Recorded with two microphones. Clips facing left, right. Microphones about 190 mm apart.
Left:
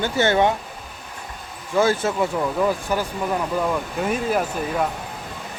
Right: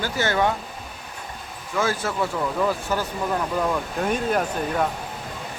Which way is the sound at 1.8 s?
25° left (ahead or behind).